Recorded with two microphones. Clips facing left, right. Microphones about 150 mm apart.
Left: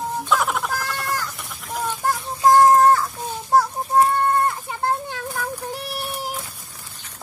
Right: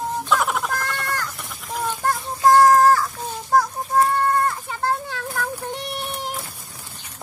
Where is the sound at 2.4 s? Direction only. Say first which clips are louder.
Even; 20° left (ahead or behind).